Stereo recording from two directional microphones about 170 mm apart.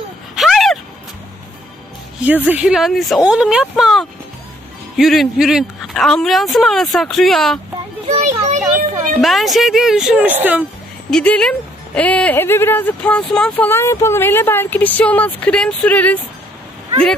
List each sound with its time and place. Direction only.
0.4 s a sound: centre (ahead or behind)
2.2 s speech: 10° right (ahead or behind)
8.1 s children playing: 40° right (ahead or behind)
9.2 s speech: centre (ahead or behind)
11.1 s speech: 5° left (ahead or behind)